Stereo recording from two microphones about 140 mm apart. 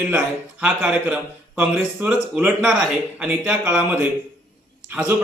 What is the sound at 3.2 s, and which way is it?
Speech, 15° right (ahead or behind).